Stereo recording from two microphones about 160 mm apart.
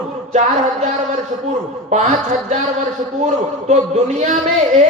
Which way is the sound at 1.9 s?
45° right (ahead or behind).